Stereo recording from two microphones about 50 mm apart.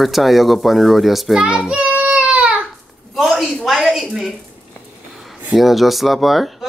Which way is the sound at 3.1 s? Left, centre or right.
Centre.